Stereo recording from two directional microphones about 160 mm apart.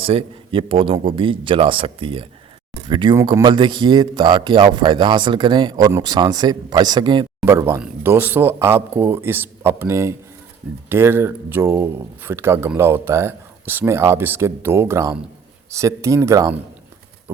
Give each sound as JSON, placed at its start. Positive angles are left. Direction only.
{"t": 0.0, "sound": "a man's voice", "side_deg": -35}
{"t": 7.4, "sound": "a man's voice", "side_deg": -15}